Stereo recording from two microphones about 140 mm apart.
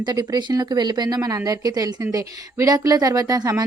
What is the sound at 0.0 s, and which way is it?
A woman's voice, 30° right (ahead or behind).